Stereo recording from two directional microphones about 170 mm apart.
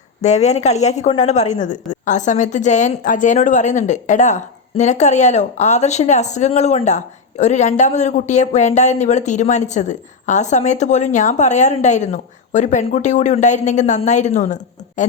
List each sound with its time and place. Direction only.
0.2 s a woman's voice: 40° left (ahead or behind)